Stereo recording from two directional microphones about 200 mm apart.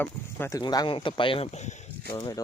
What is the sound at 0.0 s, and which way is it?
Speech, 10° left (ahead or behind).